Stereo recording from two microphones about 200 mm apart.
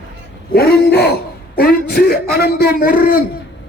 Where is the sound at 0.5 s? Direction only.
50° left (ahead or behind).